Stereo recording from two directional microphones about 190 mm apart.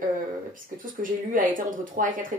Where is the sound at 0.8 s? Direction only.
45° right (ahead or behind).